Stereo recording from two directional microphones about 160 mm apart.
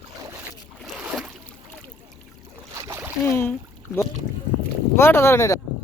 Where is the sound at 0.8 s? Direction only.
Centre (ahead or behind).